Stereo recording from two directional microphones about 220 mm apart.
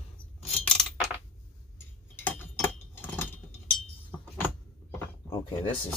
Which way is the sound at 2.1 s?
10° left (ahead or behind).